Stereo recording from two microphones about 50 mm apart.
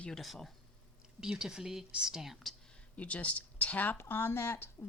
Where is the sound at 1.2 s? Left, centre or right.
Centre.